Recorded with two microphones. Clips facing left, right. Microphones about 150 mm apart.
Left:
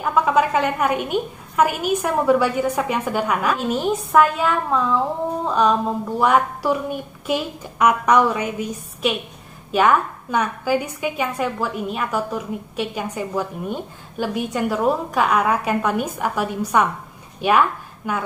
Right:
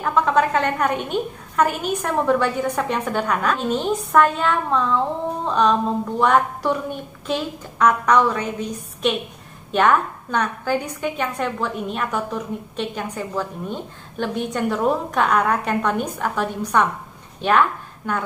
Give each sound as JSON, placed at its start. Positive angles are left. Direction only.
{"t": 0.0, "sound": "a woman's voice", "side_deg": 5}